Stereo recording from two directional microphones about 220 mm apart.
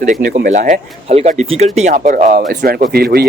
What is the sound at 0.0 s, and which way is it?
Speech, 35° right (ahead or behind).